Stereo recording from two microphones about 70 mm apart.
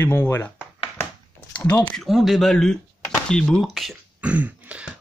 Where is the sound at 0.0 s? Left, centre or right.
Left.